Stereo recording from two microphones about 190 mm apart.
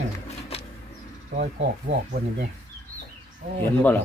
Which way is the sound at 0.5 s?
30° left (ahead or behind).